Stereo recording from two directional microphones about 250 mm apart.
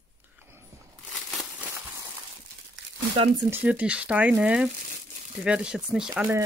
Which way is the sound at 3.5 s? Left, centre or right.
Centre.